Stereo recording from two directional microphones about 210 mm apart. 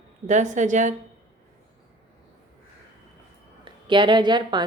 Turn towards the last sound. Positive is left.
turn(degrees=-20)  # may be behind; listen again after turning